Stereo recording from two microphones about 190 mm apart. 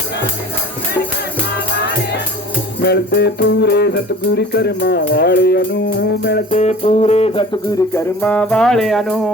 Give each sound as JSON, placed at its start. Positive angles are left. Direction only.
{"t": 2.8, "sound": "music", "side_deg": 60}
{"t": 6.5, "sound": "music", "side_deg": 35}
{"t": 7.8, "sound": "music", "side_deg": 10}